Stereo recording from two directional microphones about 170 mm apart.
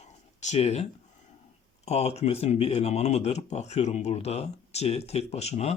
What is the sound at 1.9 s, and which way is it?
Speech, 40° left (ahead or behind).